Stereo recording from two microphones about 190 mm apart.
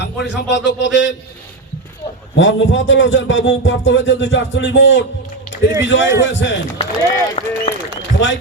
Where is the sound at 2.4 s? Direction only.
80° left.